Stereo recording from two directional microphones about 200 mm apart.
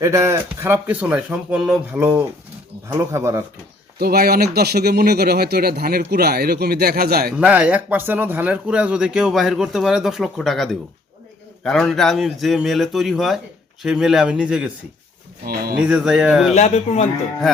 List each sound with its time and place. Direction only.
0.0 s speech: 15° right (ahead or behind)
3.9 s speech: 50° right (ahead or behind)
7.3 s speech: 5° right (ahead or behind)
15.8 s speech: 5° right (ahead or behind)
16.6 s speech: 35° left (ahead or behind)